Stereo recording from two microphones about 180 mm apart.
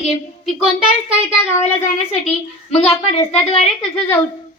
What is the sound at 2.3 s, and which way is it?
A child's voice, 35° left (ahead or behind).